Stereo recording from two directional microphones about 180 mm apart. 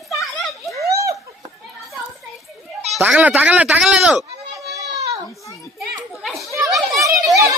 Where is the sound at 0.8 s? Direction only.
15° right (ahead or behind).